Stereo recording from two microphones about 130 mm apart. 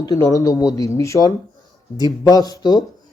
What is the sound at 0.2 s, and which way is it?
Speech, 25° left (ahead or behind).